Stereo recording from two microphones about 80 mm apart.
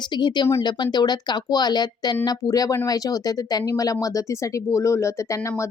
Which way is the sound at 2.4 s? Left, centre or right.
Left.